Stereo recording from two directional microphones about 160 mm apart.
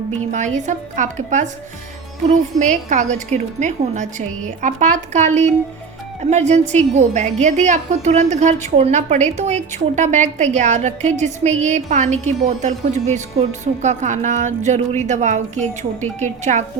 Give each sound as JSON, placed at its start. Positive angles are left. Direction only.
{"t": 0.3, "sound": "a woman's voice", "side_deg": -50}